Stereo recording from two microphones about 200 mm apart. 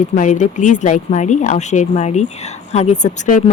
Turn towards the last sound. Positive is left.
turn(degrees=40)  # may be behind; listen again after turning